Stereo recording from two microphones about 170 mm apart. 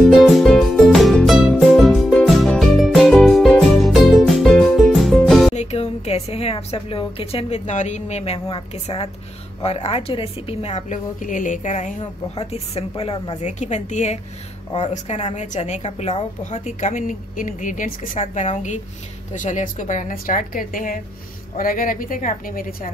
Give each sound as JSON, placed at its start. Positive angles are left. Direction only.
{"t": 0.0, "sound": "music", "side_deg": 0}
{"t": 5.5, "sound": "a woman's voice", "side_deg": 40}
{"t": 12.4, "sound": "a woman's voice", "side_deg": 35}
{"t": 18.2, "sound": "a woman's voice", "side_deg": 40}